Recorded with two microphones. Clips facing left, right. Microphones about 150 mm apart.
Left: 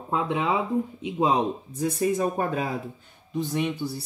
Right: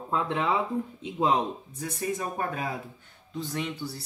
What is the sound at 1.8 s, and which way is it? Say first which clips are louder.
Speech: left 8 dB; 25° left (ahead or behind).